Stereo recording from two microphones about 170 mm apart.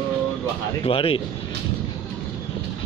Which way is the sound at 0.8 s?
30° left (ahead or behind).